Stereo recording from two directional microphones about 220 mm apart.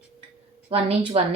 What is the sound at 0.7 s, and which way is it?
Speech, 25° right (ahead or behind).